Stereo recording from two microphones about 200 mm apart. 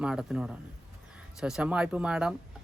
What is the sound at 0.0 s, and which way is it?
Speech, 5° right (ahead or behind).